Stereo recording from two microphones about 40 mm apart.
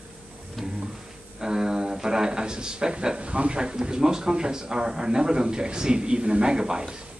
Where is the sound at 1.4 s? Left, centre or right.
Centre.